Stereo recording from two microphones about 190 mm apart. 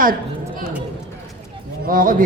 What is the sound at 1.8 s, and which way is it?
Speech, 45° right (ahead or behind).